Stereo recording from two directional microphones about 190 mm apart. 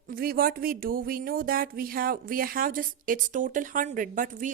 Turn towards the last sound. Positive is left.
turn(degrees=-45)  # may be behind; listen again after turning